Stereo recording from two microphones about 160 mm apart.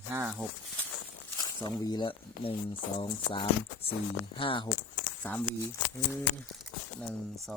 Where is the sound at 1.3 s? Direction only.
25° left (ahead or behind).